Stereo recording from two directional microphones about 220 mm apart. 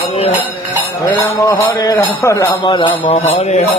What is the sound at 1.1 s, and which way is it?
Speech, 15° left (ahead or behind).